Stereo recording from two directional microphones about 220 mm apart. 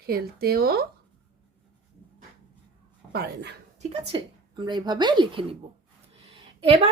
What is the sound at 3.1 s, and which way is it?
Speech, 50° right (ahead or behind).